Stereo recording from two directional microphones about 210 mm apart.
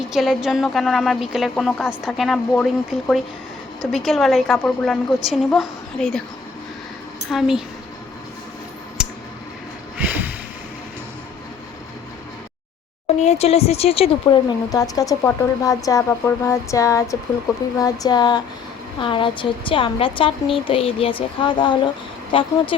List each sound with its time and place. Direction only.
0.1 s a woman's voice: centre (ahead or behind)
7.3 s a woman's voice: centre (ahead or behind)
9.0 s a sound: 5° right (ahead or behind)
13.1 s a woman's voice: 30° left (ahead or behind)
14.7 s a woman's voice: 15° left (ahead or behind)